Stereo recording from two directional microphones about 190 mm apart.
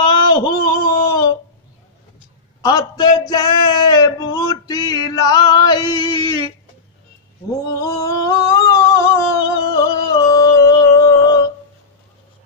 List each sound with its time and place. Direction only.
0.3 s a sound: 20° left (ahead or behind)
2.6 s male singing: 20° left (ahead or behind)
7.7 s singing: 15° left (ahead or behind)